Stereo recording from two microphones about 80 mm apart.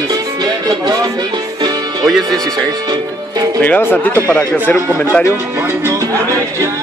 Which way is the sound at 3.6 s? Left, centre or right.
Left.